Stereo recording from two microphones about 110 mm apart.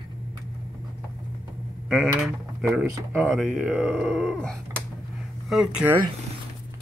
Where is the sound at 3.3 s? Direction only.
5° right (ahead or behind).